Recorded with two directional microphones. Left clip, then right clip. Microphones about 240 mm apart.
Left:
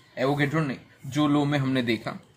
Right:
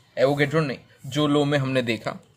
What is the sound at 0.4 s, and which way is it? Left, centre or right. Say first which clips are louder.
A man's voice: right 4 dB; right.